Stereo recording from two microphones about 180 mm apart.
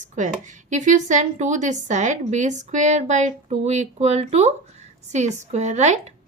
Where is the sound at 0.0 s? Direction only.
45° right (ahead or behind).